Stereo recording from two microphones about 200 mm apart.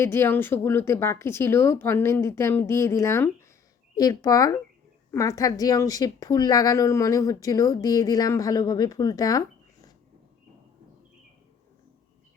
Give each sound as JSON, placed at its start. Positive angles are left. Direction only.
{"t": 0.0, "sound": "a woman's voice", "side_deg": 10}